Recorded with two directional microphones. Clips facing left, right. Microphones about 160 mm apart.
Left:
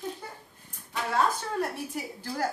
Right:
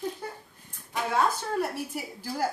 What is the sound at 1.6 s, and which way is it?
Speech, 10° right (ahead or behind).